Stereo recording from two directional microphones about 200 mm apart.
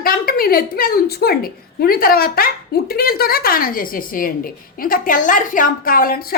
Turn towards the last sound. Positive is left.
turn(degrees=45)  # may be behind; listen again after turning